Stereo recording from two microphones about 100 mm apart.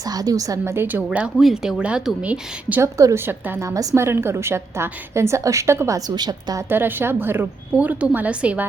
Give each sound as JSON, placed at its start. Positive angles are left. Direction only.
{"t": 0.0, "sound": "a woman's voice", "side_deg": -40}
{"t": 1.4, "sound": "a woman's voice", "side_deg": 0}
{"t": 2.8, "sound": "a woman's voice", "side_deg": -30}
{"t": 6.1, "sound": "a woman's voice", "side_deg": -40}
{"t": 6.6, "sound": "a woman's voice", "side_deg": -20}